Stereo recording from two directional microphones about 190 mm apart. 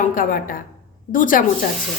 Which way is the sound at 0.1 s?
45° left (ahead or behind).